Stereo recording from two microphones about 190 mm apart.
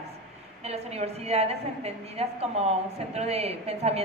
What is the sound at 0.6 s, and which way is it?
A woman's voice, 35° right (ahead or behind).